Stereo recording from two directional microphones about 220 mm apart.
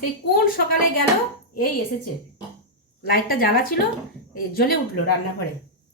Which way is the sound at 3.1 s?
40° left (ahead or behind).